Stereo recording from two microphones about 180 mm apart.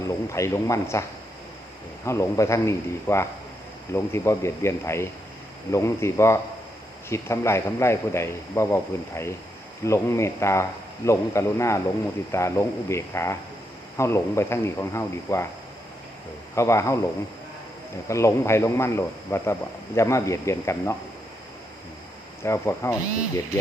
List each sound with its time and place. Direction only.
0.0 s a man's voice: 15° left (ahead or behind)
2.0 s a man's voice: 15° left (ahead or behind)
16.6 s a man's voice: 15° left (ahead or behind)
18.1 s a man's voice: 15° left (ahead or behind)
22.4 s a man's voice: 15° left (ahead or behind)